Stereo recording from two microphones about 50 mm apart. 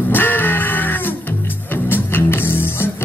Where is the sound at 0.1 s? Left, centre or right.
Left.